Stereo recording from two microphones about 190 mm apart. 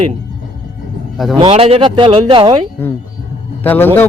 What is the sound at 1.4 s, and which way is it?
Speech, 30° right (ahead or behind).